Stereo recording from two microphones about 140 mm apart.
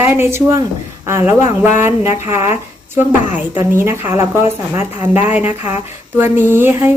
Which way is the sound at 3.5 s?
15° right (ahead or behind).